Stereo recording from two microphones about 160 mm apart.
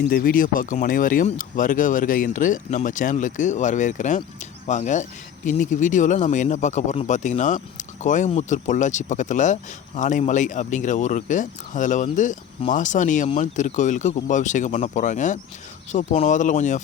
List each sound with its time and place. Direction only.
0.1 s speech: 60° left (ahead or behind)